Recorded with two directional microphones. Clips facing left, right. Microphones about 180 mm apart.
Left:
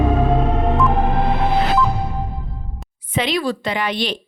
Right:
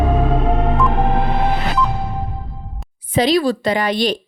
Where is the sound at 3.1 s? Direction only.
35° right (ahead or behind).